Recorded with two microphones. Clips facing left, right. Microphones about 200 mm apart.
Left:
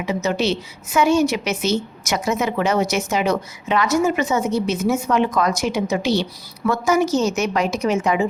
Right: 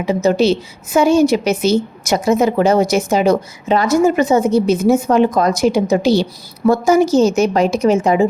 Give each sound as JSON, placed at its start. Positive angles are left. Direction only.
{"t": 0.0, "sound": "a woman's voice", "side_deg": -35}